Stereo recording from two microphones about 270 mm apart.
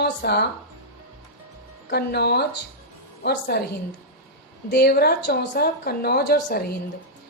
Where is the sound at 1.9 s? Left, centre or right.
Left.